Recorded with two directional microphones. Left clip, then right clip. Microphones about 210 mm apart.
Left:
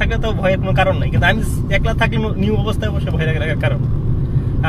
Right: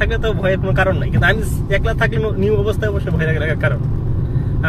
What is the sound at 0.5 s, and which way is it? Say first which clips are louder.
Speech: left 2 dB; 20° left (ahead or behind).